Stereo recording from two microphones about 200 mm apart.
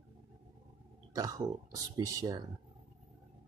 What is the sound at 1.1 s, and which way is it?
Speech, 15° right (ahead or behind).